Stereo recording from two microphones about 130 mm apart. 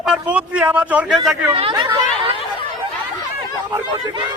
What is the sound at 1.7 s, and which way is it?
Speech, 30° right (ahead or behind).